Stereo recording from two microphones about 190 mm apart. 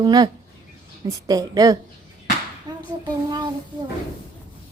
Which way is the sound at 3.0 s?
20° right (ahead or behind).